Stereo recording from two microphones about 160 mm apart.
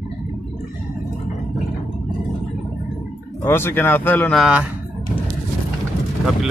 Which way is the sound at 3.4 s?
15° left (ahead or behind).